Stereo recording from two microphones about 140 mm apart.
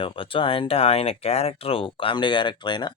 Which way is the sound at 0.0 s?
40° left (ahead or behind).